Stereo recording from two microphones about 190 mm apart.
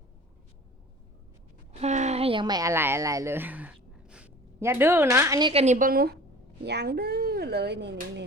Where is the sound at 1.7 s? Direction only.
35° right (ahead or behind).